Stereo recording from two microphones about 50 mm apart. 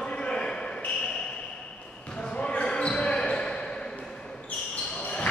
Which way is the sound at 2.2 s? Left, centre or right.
Centre.